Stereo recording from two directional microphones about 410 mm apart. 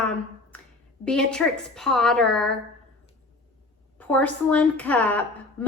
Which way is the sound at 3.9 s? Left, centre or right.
Centre.